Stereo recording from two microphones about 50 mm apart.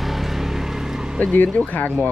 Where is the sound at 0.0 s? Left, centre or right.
Centre.